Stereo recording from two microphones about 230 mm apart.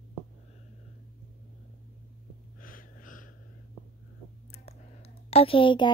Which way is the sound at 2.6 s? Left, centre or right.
Left.